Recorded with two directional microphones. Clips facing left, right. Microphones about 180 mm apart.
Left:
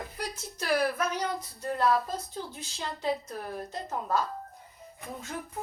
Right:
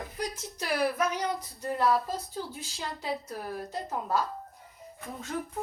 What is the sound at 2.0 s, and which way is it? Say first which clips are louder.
Speech: right 1 dB; 15° left (ahead or behind).